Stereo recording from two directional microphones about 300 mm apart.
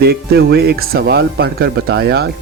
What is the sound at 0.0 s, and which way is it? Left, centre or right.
Speech, right.